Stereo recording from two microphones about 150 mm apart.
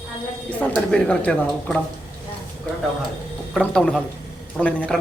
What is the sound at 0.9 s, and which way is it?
Speech, 5° left (ahead or behind).